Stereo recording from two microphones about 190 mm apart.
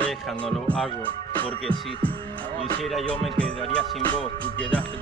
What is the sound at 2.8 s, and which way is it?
Music, 5° left (ahead or behind).